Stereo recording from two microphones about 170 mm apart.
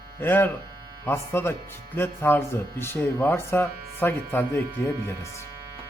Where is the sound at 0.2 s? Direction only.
10° left (ahead or behind).